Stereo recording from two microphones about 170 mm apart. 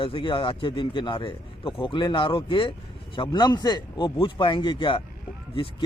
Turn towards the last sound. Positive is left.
turn(degrees=30)  # may be behind; listen again after turning